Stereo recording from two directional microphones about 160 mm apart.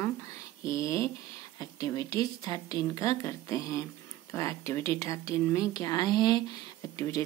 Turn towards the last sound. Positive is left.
turn(degrees=20)  # may be behind; listen again after turning